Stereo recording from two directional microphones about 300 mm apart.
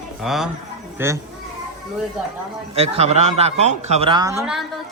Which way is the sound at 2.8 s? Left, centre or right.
Right.